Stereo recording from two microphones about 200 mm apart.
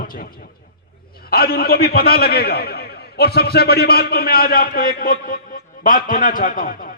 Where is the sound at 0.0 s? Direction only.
45° left (ahead or behind).